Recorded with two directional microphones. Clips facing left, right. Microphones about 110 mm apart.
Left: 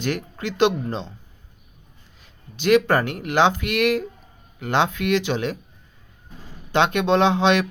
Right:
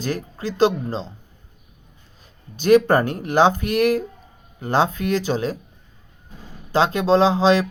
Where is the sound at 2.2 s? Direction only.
40° right (ahead or behind).